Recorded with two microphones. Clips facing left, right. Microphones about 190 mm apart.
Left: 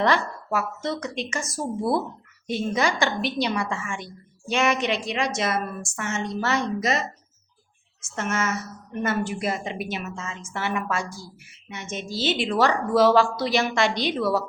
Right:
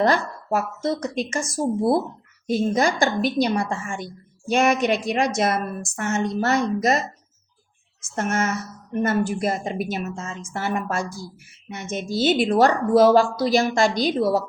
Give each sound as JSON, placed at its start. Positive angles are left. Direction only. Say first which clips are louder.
{"t": 0.0, "sound": "a woman's voice", "louder": "right 2 dB", "side_deg": -45}
{"t": 8.0, "sound": "a woman's voice", "louder": "right 3 dB", "side_deg": -55}